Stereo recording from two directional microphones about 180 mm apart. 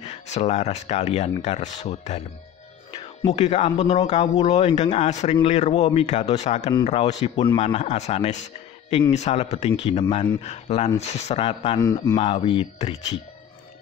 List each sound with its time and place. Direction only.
0.0 s speech: 40° left (ahead or behind)
3.3 s speech: 35° left (ahead or behind)
10.4 s speech: 35° left (ahead or behind)